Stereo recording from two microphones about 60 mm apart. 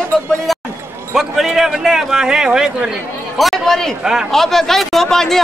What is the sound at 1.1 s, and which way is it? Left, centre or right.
A man's voice, centre.